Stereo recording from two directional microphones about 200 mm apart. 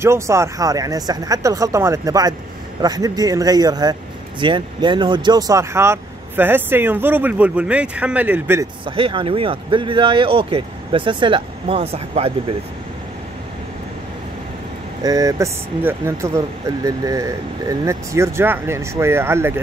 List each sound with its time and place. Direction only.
0.0 s speech: 15° right (ahead or behind)
8.8 s speech: 25° right (ahead or behind)
15.0 s speech: 15° right (ahead or behind)